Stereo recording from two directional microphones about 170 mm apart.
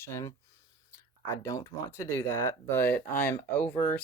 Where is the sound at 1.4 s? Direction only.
15° left (ahead or behind).